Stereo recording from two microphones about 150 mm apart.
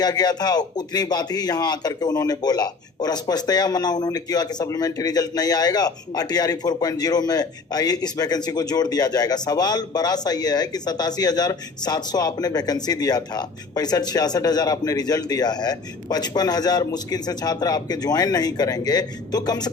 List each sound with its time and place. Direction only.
0.0 s speech: 25° left (ahead or behind)